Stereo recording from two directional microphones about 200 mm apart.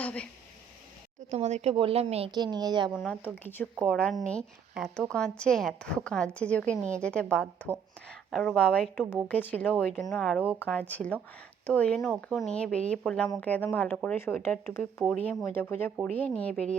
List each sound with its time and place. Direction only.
0.0 s a sound: 5° left (ahead or behind)
1.3 s a woman's voice: 35° right (ahead or behind)
3.3 s a woman's voice: 10° left (ahead or behind)